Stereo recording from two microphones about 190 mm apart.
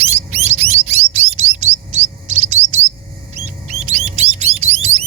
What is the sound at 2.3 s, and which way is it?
Chirp, 40° right (ahead or behind).